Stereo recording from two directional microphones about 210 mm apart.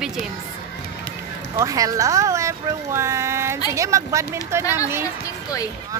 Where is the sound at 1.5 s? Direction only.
15° right (ahead or behind).